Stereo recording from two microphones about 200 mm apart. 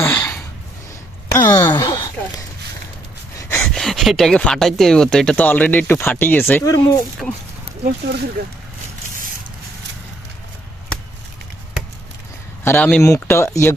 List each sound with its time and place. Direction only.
0.0 s a sound: 15° left (ahead or behind)
3.3 s speech: 10° left (ahead or behind)
7.2 s speech: 5° left (ahead or behind)
8.4 s speech: 50° right (ahead or behind)
12.6 s speech: 10° left (ahead or behind)